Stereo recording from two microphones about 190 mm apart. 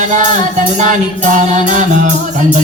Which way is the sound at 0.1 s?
40° right (ahead or behind).